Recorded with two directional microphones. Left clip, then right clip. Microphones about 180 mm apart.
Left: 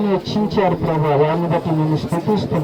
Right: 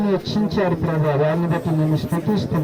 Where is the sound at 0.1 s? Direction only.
10° right (ahead or behind).